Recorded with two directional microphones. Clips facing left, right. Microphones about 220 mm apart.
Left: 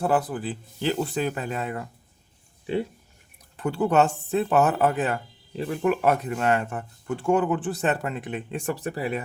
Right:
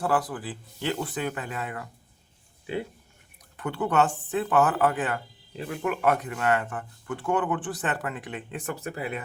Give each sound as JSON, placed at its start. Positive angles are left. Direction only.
{"t": 0.0, "sound": "speech", "side_deg": 25}
{"t": 3.6, "sound": "speech", "side_deg": 30}